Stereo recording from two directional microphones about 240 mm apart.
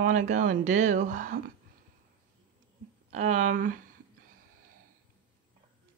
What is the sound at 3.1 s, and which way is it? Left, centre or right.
Speech, right.